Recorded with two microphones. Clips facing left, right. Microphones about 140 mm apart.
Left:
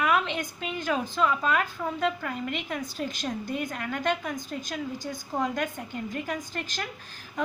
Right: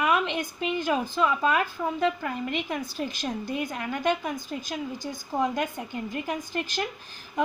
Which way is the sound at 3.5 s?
20° right (ahead or behind).